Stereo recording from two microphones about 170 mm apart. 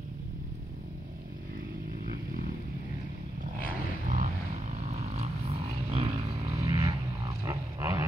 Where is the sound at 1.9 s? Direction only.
55° right (ahead or behind).